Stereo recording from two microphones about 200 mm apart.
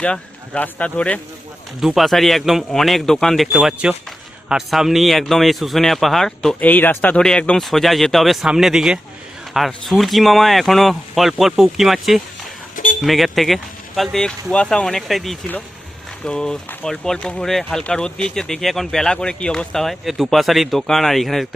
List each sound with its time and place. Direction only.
0.0 s speech: 5° left (ahead or behind)
12.7 s a sound: 40° left (ahead or behind)
13.0 s speech: centre (ahead or behind)